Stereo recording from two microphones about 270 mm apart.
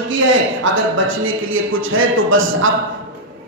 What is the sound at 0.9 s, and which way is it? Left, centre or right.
Speech, right.